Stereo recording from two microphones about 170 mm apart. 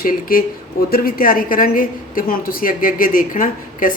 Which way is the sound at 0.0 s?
55° left (ahead or behind).